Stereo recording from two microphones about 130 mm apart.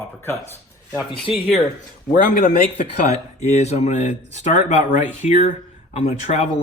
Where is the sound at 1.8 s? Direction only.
80° left.